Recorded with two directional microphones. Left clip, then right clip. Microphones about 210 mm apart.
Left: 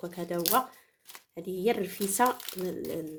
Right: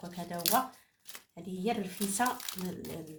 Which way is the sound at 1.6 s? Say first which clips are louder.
Left 5 dB; 55° left (ahead or behind).